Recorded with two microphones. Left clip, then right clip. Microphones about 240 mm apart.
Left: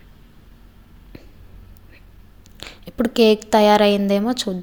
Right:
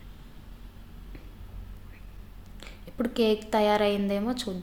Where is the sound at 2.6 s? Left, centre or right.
Left.